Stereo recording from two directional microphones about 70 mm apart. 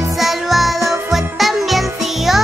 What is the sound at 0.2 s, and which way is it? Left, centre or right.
Music, centre.